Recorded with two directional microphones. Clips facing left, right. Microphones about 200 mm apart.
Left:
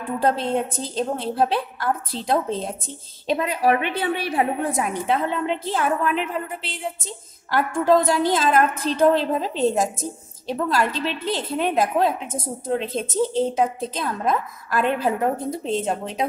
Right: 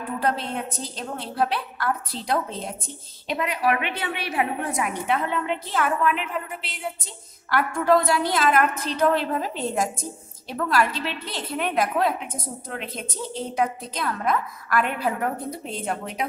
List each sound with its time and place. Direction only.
0.2 s a woman's voice: 25° left (ahead or behind)